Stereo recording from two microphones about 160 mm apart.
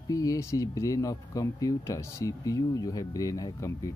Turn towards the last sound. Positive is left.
turn(degrees=20)  # may be behind; listen again after turning